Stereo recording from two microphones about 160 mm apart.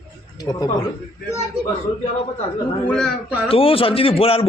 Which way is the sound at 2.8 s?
Centre (ahead or behind).